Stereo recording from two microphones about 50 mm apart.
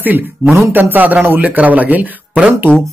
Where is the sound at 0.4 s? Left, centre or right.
Right.